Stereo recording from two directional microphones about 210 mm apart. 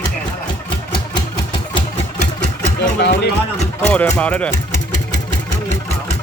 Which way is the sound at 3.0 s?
55° left (ahead or behind).